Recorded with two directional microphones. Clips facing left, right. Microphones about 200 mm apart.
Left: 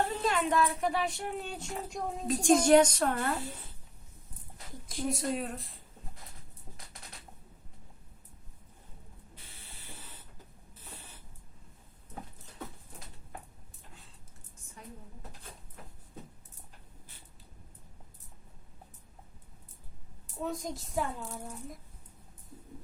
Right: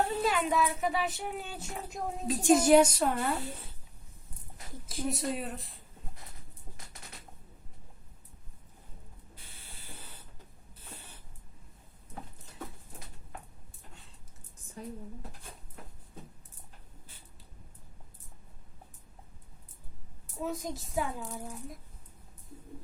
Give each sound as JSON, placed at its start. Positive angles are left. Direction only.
{"t": 0.2, "sound": "speech", "side_deg": -5}
{"t": 4.9, "sound": "speech", "side_deg": 0}
{"t": 14.8, "sound": "speech", "side_deg": -35}
{"t": 20.4, "sound": "speech", "side_deg": 0}